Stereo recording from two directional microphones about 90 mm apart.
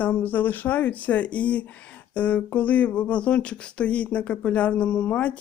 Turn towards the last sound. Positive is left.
turn(degrees=15)  # may be behind; listen again after turning